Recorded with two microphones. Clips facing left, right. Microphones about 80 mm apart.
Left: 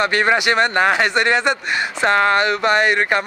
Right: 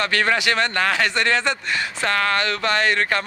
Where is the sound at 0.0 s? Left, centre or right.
Centre.